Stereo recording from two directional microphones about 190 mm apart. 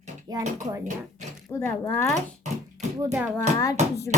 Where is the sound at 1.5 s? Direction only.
15° left (ahead or behind).